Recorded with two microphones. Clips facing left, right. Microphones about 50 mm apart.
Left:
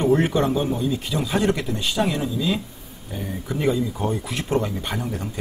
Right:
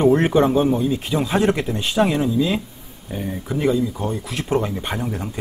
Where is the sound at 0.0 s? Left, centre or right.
Right.